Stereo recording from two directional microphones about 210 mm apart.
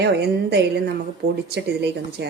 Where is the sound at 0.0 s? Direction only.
50° right (ahead or behind).